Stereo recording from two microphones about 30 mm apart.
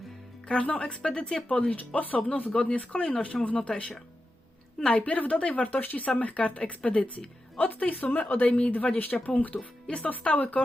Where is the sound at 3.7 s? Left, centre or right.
Left.